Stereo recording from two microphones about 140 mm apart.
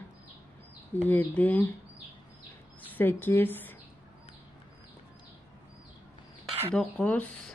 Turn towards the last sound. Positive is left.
turn(degrees=10)  # may be behind; listen again after turning